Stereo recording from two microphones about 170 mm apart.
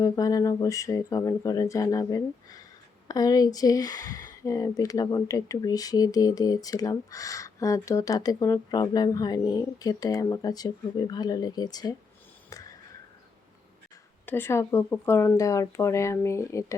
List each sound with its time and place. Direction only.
0.0 s speech: 20° left (ahead or behind)
14.3 s speech: 15° left (ahead or behind)